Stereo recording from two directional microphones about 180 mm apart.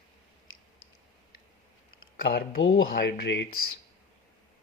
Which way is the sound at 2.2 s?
60° left (ahead or behind).